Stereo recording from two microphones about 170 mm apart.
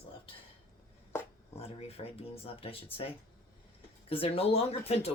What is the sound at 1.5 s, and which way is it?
Speech, 40° left (ahead or behind).